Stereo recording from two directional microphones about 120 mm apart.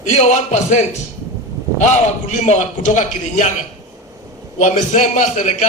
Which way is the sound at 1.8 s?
75° left (ahead or behind).